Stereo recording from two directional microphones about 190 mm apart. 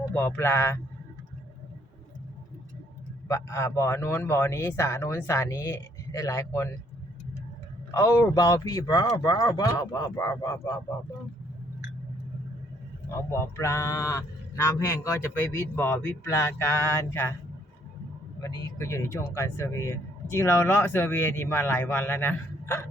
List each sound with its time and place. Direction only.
0.1 s speech: 10° left (ahead or behind)
3.2 s speech: 15° left (ahead or behind)
7.9 s speech: 15° left (ahead or behind)
13.1 s speech: 15° left (ahead or behind)
18.8 s speech: 15° left (ahead or behind)